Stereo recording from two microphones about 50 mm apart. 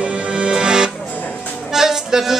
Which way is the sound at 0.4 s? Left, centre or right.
Centre.